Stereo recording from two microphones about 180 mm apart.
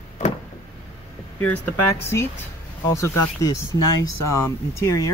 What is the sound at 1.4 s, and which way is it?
Speech, 10° left (ahead or behind).